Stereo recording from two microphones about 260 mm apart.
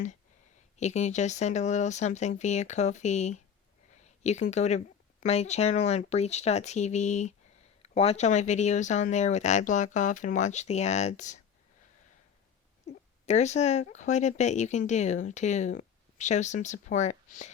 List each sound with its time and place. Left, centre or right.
0.8 s speech: left
13.2 s speech: left